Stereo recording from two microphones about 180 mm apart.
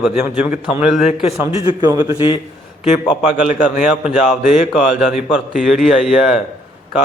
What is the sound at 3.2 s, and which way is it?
A man's voice, 5° right (ahead or behind).